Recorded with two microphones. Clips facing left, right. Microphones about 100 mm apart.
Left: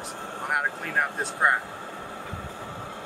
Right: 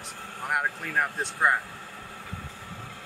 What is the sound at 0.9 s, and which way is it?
Speech, 5° left (ahead or behind).